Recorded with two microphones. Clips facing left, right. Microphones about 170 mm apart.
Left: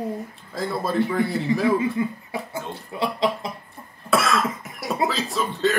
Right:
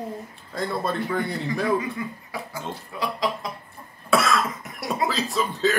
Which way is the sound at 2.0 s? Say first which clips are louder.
Left 6 dB; 25° left (ahead or behind).